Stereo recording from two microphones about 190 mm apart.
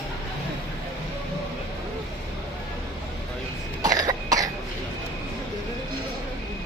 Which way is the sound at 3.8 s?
20° right (ahead or behind).